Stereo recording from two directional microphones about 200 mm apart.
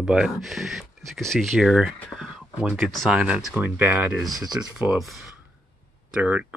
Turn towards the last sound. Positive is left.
turn(degrees=-5)  # may be behind; listen again after turning